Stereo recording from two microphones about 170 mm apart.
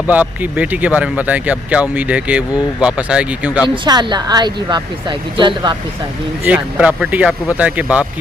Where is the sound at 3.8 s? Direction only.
25° right (ahead or behind).